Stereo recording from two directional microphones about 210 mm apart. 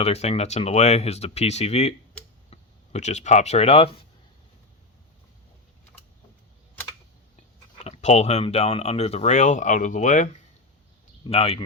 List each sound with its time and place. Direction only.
0.0 s speech: 30° left (ahead or behind)
2.2 s a sound: 5° left (ahead or behind)
2.5 s speech: 35° left (ahead or behind)
7.9 s speech: 30° left (ahead or behind)